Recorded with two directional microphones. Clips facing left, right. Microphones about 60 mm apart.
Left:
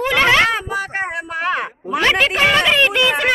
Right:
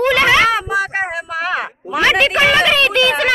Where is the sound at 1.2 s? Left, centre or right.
Centre.